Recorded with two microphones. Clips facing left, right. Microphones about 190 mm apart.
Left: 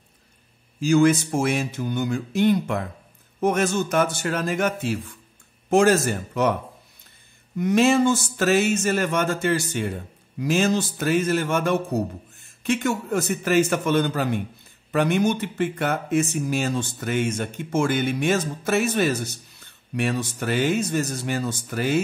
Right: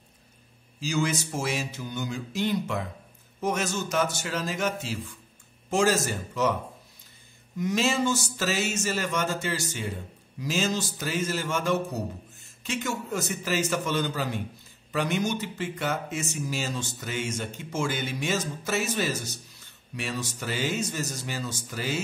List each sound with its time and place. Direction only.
0.7 s speech: 55° left (ahead or behind)
7.5 s speech: 55° left (ahead or behind)